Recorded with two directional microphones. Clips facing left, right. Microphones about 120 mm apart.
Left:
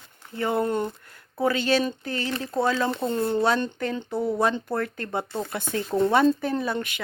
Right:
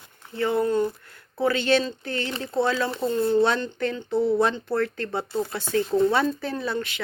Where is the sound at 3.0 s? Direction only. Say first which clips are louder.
Right 4 dB; 20° left (ahead or behind).